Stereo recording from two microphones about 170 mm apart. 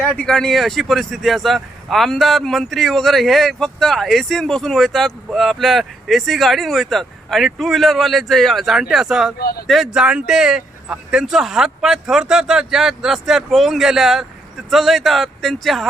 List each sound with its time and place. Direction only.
0.0 s speech: 5° left (ahead or behind)
9.4 s speech: 65° left (ahead or behind)
9.6 s speech: centre (ahead or behind)